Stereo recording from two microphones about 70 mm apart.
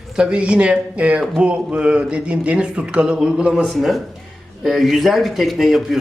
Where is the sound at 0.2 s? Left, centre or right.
Centre.